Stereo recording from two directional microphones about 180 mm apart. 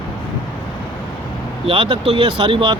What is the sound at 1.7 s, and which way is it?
Speech, 30° right (ahead or behind).